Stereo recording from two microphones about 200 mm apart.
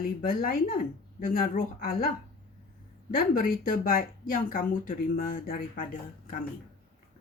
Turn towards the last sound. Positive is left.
turn(degrees=45)  # may be behind; listen again after turning